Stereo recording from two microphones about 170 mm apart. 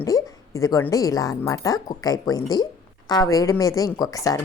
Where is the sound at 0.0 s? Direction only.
20° left (ahead or behind).